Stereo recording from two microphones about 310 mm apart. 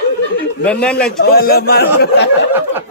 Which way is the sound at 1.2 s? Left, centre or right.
Left.